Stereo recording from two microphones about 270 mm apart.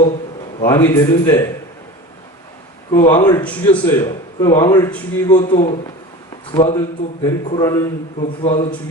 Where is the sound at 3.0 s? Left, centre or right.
Centre.